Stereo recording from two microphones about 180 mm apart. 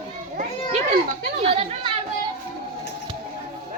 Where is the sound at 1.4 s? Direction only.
35° right (ahead or behind).